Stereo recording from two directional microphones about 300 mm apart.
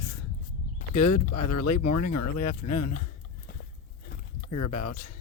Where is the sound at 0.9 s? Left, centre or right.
Left.